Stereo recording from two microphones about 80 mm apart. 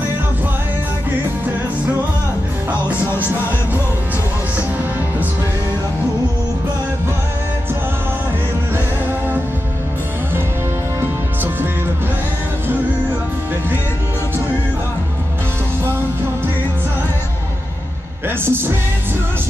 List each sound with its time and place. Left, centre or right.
11.0 s music: right
18.4 s music: right